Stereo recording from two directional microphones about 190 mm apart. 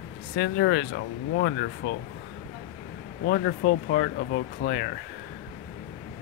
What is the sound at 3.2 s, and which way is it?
Speech, 55° left (ahead or behind).